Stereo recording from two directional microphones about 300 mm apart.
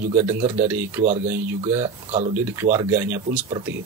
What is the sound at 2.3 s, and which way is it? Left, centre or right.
Speech, centre.